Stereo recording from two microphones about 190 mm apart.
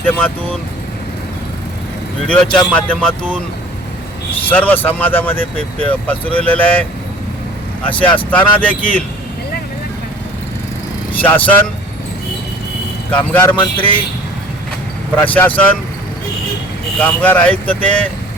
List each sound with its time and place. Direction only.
0.0 s speech: 10° left (ahead or behind)
2.2 s speech: 5° left (ahead or behind)
4.4 s speech: 10° left (ahead or behind)
8.1 s speech: 10° left (ahead or behind)
11.2 s speech: 10° left (ahead or behind)
13.1 s speech: 10° left (ahead or behind)
15.1 s speech: 10° left (ahead or behind)
17.0 s speech: 10° left (ahead or behind)